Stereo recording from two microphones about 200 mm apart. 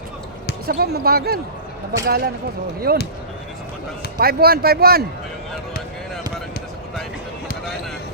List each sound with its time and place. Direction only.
0.7 s a man's voice: 50° right (ahead or behind)
4.2 s a man's voice: 50° right (ahead or behind)